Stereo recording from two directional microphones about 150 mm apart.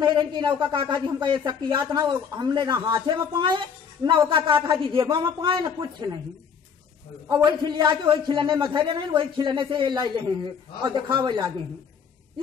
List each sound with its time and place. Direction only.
0.0 s a man's voice: 30° right (ahead or behind)
7.2 s a man's voice: 30° right (ahead or behind)